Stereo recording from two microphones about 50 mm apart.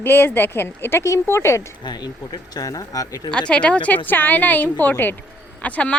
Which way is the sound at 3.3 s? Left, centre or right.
Left.